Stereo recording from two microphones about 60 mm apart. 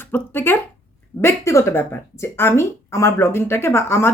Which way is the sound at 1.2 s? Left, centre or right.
Left.